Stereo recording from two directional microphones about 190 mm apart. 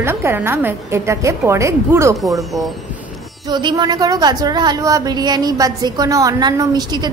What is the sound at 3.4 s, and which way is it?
A woman's voice, 25° right (ahead or behind).